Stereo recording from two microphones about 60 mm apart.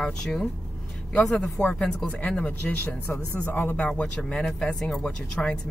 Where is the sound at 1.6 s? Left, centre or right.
Centre.